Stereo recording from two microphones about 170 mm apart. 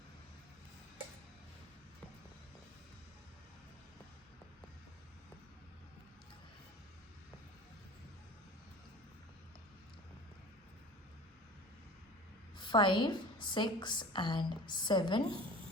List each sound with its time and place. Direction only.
12.5 s a woman's voice: 25° left (ahead or behind)